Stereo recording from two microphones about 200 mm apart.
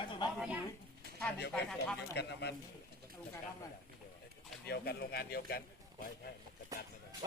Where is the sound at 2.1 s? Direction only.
55° left (ahead or behind).